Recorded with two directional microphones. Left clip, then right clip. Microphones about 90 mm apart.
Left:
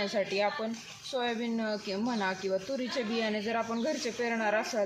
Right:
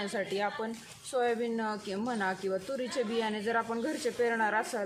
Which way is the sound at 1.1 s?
35° right (ahead or behind).